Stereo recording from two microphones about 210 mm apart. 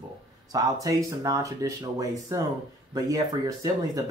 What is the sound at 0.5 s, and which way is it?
Speech, 15° right (ahead or behind).